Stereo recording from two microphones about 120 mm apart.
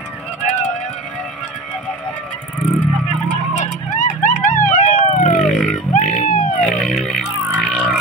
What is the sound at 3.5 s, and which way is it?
Vehicle, 90° left.